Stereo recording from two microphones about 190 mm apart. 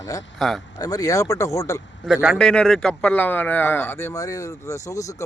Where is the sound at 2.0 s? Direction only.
5° right (ahead or behind).